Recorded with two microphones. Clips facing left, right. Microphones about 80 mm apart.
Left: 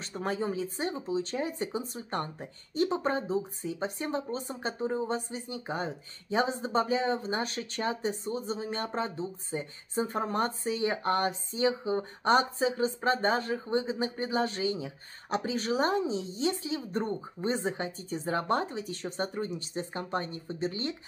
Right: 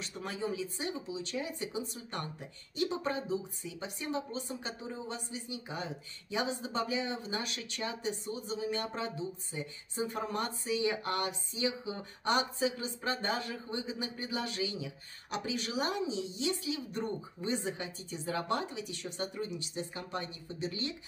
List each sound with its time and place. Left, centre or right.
0.0 s speech: left